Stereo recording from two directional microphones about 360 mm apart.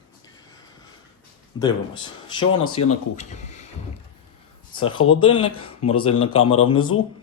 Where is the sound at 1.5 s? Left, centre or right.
Centre.